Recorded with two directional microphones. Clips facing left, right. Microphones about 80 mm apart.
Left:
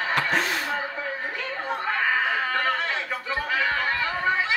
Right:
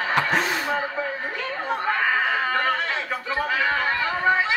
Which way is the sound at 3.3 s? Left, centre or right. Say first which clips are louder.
Right 2 dB; right.